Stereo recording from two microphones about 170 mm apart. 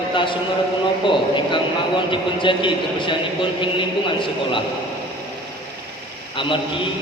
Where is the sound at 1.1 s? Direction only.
30° left (ahead or behind).